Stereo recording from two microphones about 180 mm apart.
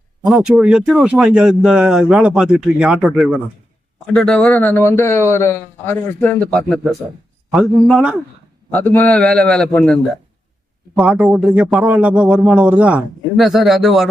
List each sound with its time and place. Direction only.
0.3 s a man's voice: 5° right (ahead or behind)
8.7 s speech: 10° left (ahead or behind)
10.9 s speech: 5° right (ahead or behind)